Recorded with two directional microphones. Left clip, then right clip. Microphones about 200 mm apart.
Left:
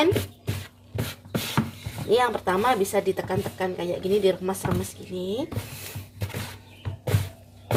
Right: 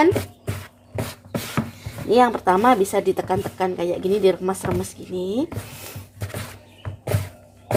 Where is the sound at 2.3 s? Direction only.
40° right (ahead or behind).